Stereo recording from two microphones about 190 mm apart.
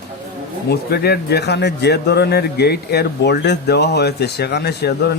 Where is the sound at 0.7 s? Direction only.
55° left (ahead or behind).